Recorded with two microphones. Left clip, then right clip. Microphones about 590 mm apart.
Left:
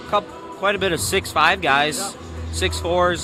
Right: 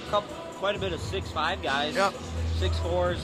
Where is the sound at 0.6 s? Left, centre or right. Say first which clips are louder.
Left 9 dB; left.